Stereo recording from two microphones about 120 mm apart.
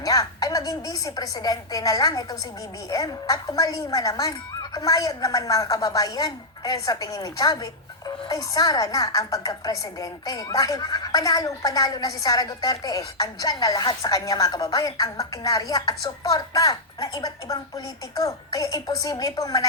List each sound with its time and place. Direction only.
0.0 s a woman's voice: 30° left (ahead or behind)